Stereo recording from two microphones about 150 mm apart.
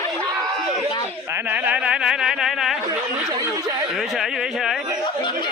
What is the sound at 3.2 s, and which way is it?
Chatter, 20° right (ahead or behind).